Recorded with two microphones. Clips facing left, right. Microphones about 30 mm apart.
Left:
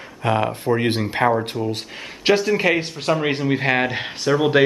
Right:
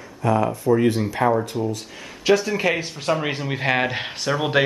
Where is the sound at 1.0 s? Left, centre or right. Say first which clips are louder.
Left 1 dB; left.